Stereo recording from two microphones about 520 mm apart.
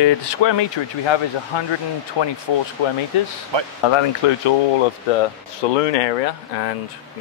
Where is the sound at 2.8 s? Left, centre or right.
Left.